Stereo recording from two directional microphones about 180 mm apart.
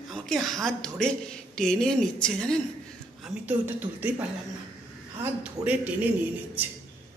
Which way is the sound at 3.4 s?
10° right (ahead or behind).